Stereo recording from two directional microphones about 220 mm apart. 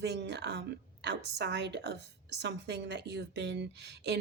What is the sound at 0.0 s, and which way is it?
A woman's voice, 50° right (ahead or behind).